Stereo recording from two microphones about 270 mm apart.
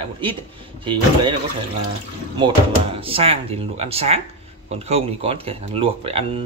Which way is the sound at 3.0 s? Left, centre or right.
Right.